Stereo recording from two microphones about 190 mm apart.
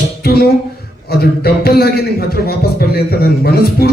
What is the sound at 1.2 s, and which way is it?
A man's voice, 55° left (ahead or behind).